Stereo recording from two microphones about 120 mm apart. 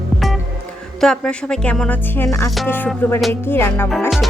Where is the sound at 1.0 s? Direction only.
5° left (ahead or behind).